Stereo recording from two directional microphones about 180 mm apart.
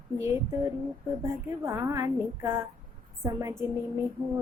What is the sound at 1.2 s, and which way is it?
A woman's voice, 15° right (ahead or behind).